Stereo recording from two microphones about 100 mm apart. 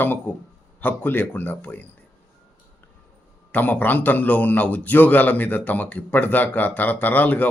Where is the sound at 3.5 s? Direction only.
15° left (ahead or behind).